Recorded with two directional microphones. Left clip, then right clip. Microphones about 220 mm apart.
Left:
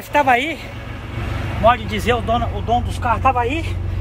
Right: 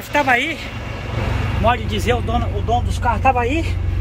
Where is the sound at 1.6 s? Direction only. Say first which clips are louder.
Left 3 dB; 5° left (ahead or behind).